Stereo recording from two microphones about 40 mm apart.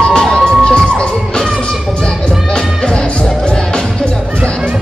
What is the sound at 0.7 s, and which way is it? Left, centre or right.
Music, left.